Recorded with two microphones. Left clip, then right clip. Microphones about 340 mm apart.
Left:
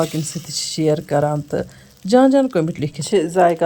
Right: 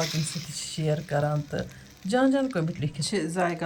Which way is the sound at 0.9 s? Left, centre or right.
Left.